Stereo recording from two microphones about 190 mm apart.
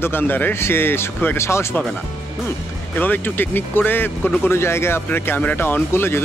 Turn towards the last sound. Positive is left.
turn(degrees=10)  # may be behind; listen again after turning